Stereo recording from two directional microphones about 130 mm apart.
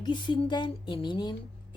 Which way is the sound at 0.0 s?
35° left (ahead or behind).